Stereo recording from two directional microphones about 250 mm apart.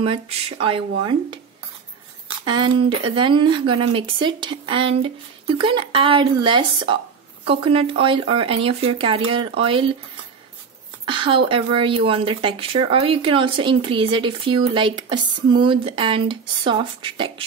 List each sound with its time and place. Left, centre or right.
0.0 s speech: right
2.4 s speech: centre
11.1 s speech: centre